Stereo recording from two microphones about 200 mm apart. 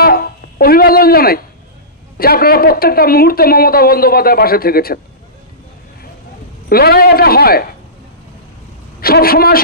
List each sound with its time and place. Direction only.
0.0 s a sound: 50° left (ahead or behind)
2.1 s speech: 50° left (ahead or behind)
6.7 s speech: 50° left (ahead or behind)
9.0 s speech: 50° left (ahead or behind)